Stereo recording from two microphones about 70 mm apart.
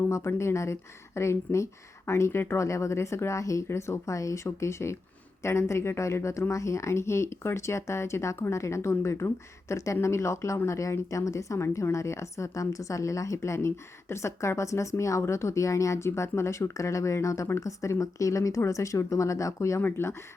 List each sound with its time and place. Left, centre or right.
0.1 s a woman's voice: left
19.8 s speech: left